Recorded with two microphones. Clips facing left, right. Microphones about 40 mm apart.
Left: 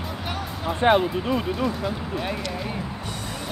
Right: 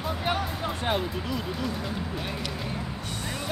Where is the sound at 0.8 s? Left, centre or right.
Left.